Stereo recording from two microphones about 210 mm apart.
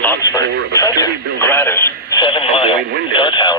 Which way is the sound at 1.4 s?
10° left (ahead or behind).